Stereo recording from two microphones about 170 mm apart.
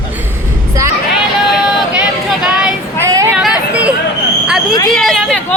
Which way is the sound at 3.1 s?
20° right (ahead or behind).